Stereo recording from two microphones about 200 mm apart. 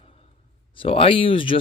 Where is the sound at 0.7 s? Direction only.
25° left (ahead or behind).